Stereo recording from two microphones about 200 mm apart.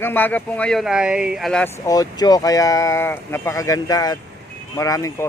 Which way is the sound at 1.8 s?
20° left (ahead or behind).